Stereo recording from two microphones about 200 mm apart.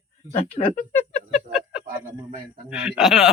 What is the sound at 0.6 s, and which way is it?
Speech, 35° left (ahead or behind).